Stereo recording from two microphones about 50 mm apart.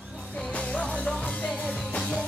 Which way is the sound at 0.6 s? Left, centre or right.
Left.